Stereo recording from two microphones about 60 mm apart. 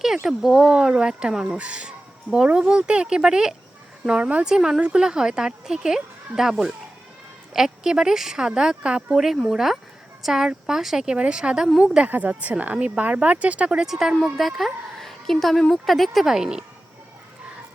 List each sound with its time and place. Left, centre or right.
0.3 s speech: centre
1.5 s speech: centre
12.0 s a woman's voice: right